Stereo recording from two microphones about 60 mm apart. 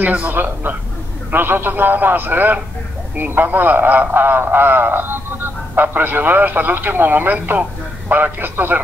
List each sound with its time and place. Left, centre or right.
0.0 s a man's voice: right